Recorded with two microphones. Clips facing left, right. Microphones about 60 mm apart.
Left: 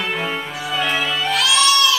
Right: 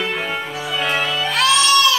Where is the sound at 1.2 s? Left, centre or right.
Right.